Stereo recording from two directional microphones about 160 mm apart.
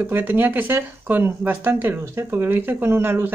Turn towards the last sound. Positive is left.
turn(degrees=-15)  # may be behind; listen again after turning